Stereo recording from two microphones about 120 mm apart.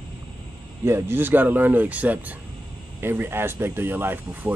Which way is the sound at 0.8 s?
20° right (ahead or behind).